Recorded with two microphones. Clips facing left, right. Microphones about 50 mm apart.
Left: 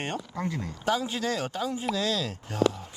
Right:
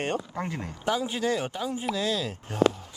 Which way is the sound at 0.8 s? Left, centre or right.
Right.